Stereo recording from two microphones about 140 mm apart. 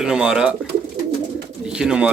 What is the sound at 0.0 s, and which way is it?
Speech, 5° right (ahead or behind).